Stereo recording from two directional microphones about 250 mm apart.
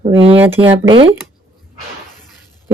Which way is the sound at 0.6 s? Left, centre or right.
Right.